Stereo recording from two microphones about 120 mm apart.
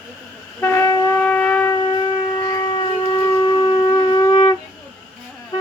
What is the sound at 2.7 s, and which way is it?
Shofar, 40° left (ahead or behind).